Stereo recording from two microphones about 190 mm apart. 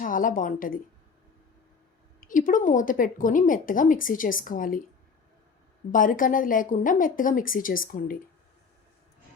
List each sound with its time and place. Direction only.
0.0 s a woman's voice: 45° left (ahead or behind)
2.2 s a woman's voice: 45° left (ahead or behind)
5.9 s a woman's voice: 45° left (ahead or behind)